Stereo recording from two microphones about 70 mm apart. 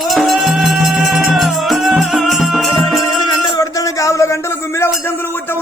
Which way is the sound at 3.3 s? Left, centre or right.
Left.